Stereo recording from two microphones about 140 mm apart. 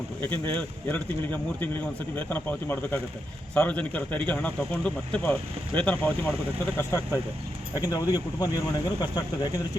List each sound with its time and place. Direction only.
0.2 s speech: 15° left (ahead or behind); by 9.5 s 30° left (ahead or behind)